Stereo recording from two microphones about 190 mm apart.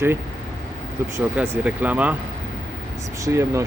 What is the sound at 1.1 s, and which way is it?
Speech, 10° right (ahead or behind).